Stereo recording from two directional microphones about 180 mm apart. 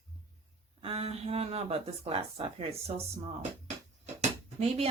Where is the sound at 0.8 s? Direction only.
35° right (ahead or behind).